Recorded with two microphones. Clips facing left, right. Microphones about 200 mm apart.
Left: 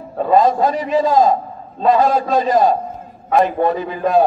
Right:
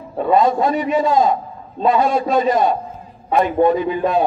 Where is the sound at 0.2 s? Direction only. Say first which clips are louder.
Left 1 dB; 35° left (ahead or behind).